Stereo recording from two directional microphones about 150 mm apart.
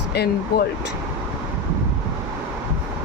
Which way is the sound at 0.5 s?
90° left.